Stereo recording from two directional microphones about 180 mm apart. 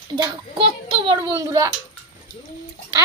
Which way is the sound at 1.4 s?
20° right (ahead or behind).